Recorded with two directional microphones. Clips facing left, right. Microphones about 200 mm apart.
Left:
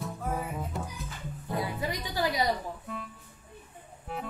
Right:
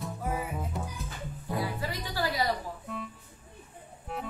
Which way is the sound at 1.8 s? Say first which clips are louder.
Left 2 dB; 20° left (ahead or behind).